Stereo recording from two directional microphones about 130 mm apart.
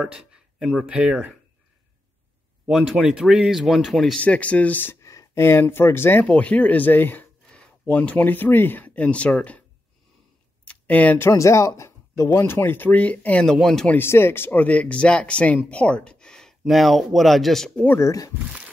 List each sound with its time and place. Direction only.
0.0 s speech: 5° right (ahead or behind)
2.7 s speech: 5° right (ahead or behind)
10.6 s speech: 10° left (ahead or behind)
13.9 s speech: 20° left (ahead or behind); by 17.8 s centre (ahead or behind)
17.8 s speech: 20° left (ahead or behind)